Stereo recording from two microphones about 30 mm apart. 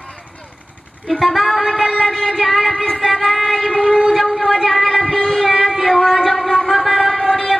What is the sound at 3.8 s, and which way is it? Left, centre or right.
Civil defense siren, right.